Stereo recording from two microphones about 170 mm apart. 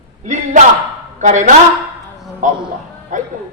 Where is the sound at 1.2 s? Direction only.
45° right (ahead or behind).